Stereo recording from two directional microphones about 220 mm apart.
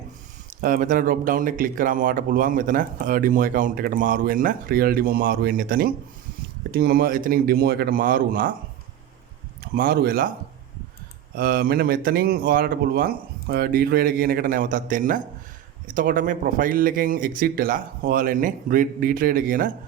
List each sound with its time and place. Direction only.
0.6 s speech: 40° right (ahead or behind)
9.7 s speech: 40° right (ahead or behind)
11.3 s speech: 45° right (ahead or behind)